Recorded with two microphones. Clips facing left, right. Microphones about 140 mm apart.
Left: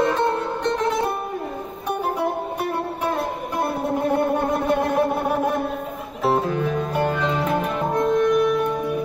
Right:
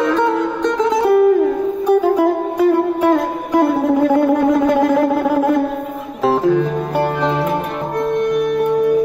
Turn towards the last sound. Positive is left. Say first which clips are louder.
# right 5 dB
turn(degrees=-65)  # may be behind; listen again after turning